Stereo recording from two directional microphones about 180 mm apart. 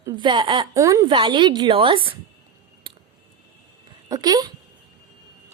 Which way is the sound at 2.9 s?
30° right (ahead or behind).